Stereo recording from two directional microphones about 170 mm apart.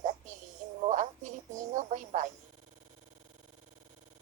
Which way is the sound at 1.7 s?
50° right (ahead or behind).